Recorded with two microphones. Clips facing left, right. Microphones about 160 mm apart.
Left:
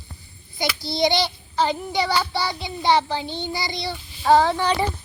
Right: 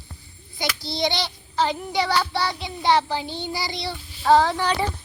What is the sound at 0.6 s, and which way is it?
Child singing, 10° left (ahead or behind).